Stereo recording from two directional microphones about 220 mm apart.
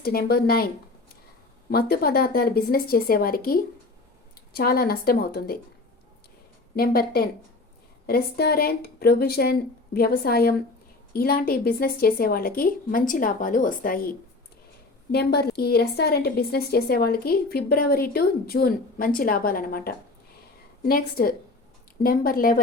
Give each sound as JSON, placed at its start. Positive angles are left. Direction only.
{"t": 0.0, "sound": "a woman's voice", "side_deg": 45}
{"t": 1.7, "sound": "a woman's voice", "side_deg": 45}
{"t": 6.7, "sound": "a woman's voice", "side_deg": 45}